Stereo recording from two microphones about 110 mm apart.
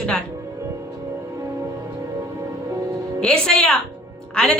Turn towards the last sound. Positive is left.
turn(degrees=5)  # may be behind; listen again after turning